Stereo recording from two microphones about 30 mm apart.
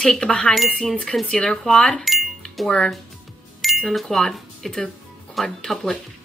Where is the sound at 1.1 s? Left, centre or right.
Centre.